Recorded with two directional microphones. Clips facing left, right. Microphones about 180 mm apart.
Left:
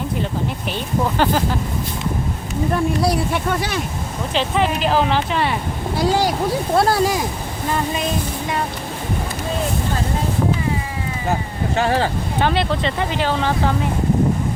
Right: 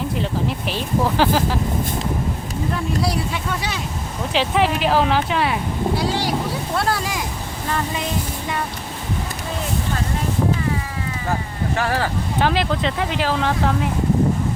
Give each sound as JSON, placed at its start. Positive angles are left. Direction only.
{"t": 0.7, "sound": "speech", "side_deg": 0}
{"t": 2.7, "sound": "speech", "side_deg": 55}
{"t": 4.4, "sound": "speech", "side_deg": 0}
{"t": 6.0, "sound": "speech", "side_deg": 45}
{"t": 11.3, "sound": "a sound", "side_deg": 25}
{"t": 12.4, "sound": "speech", "side_deg": 0}